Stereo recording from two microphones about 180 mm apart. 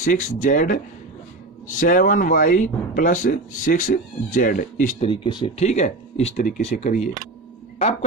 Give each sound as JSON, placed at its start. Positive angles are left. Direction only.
{"t": 0.0, "sound": "speech", "side_deg": 45}
{"t": 5.0, "sound": "speech", "side_deg": 30}